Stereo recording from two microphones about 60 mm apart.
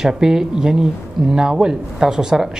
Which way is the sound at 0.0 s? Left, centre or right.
Centre.